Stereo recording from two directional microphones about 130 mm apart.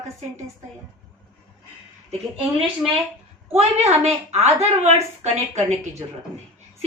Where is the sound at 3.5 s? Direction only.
55° right (ahead or behind).